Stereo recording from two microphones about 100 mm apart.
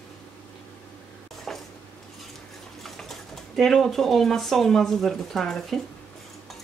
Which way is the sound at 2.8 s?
Centre (ahead or behind).